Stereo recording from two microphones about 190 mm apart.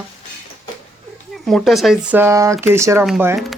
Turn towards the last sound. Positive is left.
turn(degrees=0)  # may be behind; listen again after turning